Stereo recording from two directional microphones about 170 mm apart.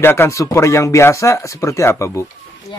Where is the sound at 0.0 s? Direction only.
15° left (ahead or behind).